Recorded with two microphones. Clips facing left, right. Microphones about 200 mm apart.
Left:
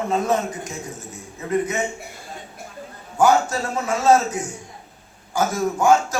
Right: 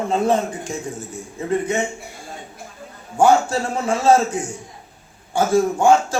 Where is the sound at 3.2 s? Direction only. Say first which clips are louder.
Right 2 dB; 30° right (ahead or behind).